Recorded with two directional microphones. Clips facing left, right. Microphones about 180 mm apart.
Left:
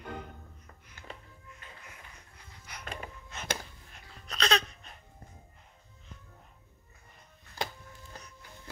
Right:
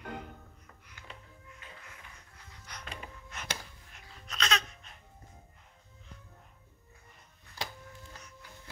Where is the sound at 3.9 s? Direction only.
35° left (ahead or behind).